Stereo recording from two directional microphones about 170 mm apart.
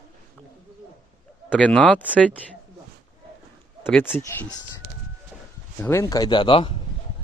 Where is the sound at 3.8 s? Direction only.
10° left (ahead or behind).